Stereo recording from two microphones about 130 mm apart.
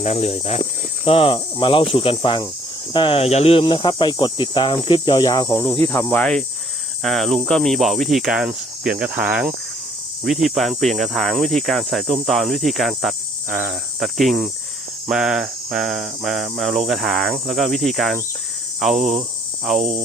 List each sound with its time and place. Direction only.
0.0 s speech: 55° left (ahead or behind); by 5.6 s 30° left (ahead or behind)
5.9 s snake: 15° left (ahead or behind)
7.0 s cricket: centre (ahead or behind)